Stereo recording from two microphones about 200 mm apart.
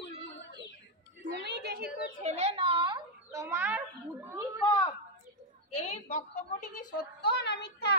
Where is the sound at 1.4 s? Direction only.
55° right (ahead or behind).